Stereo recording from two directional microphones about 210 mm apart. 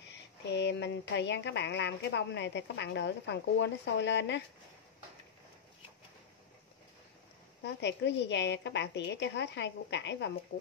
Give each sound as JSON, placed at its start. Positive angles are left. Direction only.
{"t": 0.1, "sound": "speech", "side_deg": 55}
{"t": 7.6, "sound": "speech", "side_deg": 55}